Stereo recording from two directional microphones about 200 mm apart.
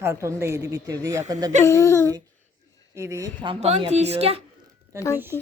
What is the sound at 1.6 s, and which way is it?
Speech, 15° left (ahead or behind).